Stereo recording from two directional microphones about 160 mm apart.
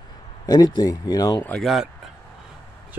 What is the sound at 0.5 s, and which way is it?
Speech, 25° left (ahead or behind).